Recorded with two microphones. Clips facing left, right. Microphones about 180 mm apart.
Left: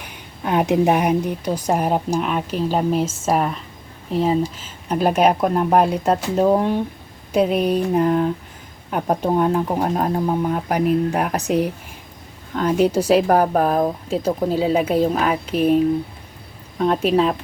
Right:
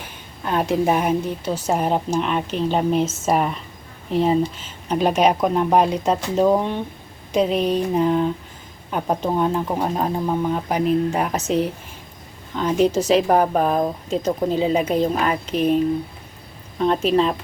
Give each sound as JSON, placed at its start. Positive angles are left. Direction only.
{"t": 0.4, "sound": "a woman's voice", "side_deg": 20}